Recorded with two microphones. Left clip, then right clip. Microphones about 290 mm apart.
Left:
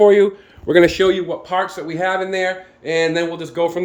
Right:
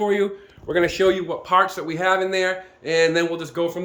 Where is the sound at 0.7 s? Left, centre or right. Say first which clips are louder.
Left 8 dB; left.